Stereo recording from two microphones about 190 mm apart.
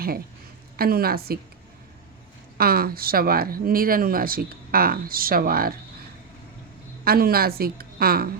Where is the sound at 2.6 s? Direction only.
50° right (ahead or behind).